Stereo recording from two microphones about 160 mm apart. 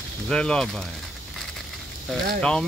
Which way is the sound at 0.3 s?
5° left (ahead or behind).